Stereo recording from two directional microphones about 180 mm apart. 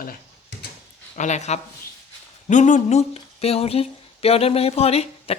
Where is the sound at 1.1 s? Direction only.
40° left (ahead or behind).